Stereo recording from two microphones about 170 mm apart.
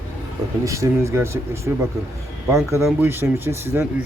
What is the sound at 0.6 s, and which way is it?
Speech, 20° right (ahead or behind).